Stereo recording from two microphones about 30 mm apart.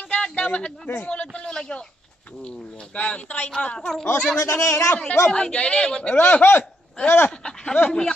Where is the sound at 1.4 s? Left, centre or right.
Left.